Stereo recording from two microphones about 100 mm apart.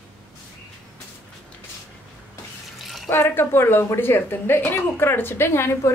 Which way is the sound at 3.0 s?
20° left (ahead or behind).